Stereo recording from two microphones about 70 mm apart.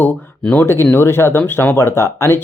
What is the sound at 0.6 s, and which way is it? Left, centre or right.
Speech, left.